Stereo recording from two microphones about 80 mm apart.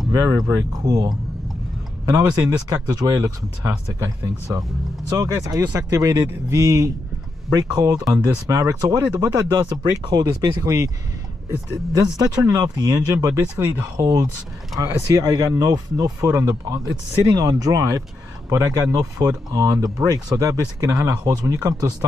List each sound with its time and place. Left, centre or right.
0.1 s speech: right
12.2 s speech: right
13.9 s speech: right